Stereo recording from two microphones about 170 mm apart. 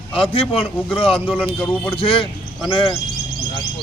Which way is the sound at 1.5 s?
10° left (ahead or behind).